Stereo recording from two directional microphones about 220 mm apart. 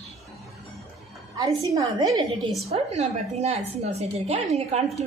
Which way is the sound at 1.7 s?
15° right (ahead or behind).